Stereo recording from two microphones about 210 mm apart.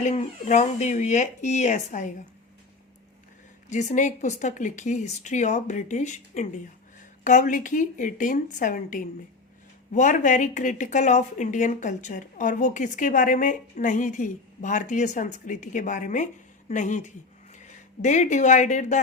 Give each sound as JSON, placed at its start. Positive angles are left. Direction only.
{"t": 0.0, "sound": "a woman's voice", "side_deg": 35}
{"t": 3.7, "sound": "a woman's voice", "side_deg": 35}